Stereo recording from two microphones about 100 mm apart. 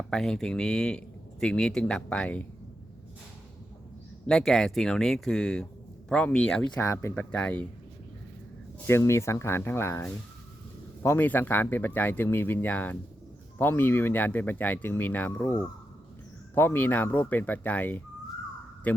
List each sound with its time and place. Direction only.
0.1 s speech: 5° left (ahead or behind)
4.3 s speech: 5° left (ahead or behind)
6.7 s speech: 25° left (ahead or behind)
7.2 s speech: 10° left (ahead or behind)
8.9 s speech: 25° left (ahead or behind)
16.6 s speech: 20° left (ahead or behind)